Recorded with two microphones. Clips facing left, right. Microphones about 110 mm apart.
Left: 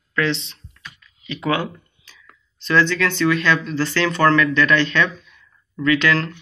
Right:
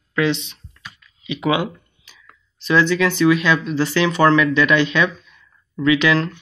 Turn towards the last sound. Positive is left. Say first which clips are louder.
# right 2 dB
turn(degrees=-15)  # may be behind; listen again after turning